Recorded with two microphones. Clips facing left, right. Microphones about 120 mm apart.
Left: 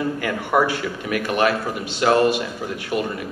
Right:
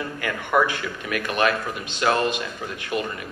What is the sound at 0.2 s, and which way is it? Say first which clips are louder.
A man's voice: even; 20° left (ahead or behind).